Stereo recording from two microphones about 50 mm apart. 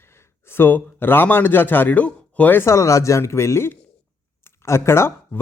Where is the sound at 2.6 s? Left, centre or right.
Left.